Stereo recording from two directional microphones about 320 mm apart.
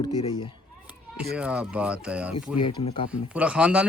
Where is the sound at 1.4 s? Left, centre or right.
Centre.